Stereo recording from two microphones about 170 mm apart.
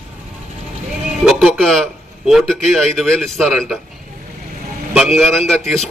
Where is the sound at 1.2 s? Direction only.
Centre (ahead or behind).